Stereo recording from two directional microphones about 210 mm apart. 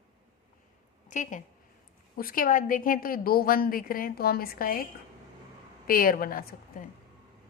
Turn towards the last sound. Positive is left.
turn(degrees=45)  # may be behind; listen again after turning